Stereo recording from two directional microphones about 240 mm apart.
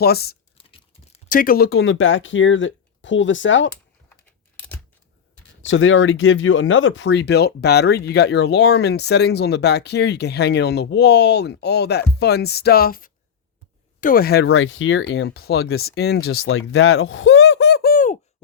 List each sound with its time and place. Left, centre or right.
0.0 s speech: left
0.7 s speech: left
5.6 s speech: left
14.5 s speech: left
16.3 s a sound: left